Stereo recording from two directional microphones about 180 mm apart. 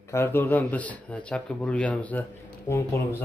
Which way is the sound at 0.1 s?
15° left (ahead or behind).